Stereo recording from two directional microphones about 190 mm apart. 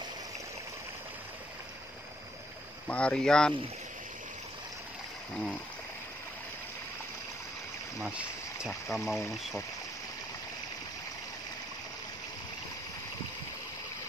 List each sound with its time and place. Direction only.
2.9 s speech: 5° left (ahead or behind)
5.3 s speech: 5° left (ahead or behind)
8.6 s speech: centre (ahead or behind)